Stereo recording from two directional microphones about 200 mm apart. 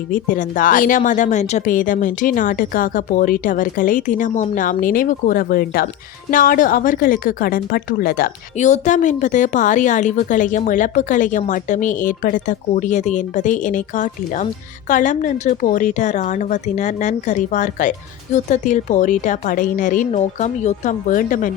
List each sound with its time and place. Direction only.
0.1 s speech: 40° left (ahead or behind)